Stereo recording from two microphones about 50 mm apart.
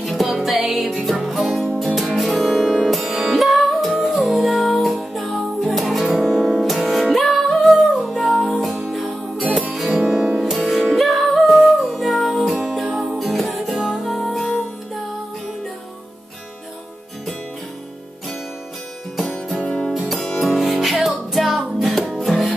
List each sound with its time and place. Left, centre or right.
0.0 s music: centre
2.9 s music: centre
19.1 s music: centre
19.6 s music: left
20.5 s music: centre